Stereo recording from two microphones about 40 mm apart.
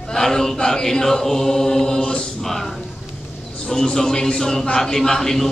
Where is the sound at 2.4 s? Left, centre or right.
Centre.